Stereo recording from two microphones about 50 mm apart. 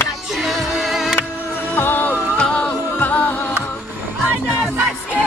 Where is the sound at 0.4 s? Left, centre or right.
Centre.